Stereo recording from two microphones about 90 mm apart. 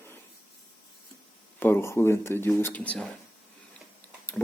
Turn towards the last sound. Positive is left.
turn(degrees=15)  # may be behind; listen again after turning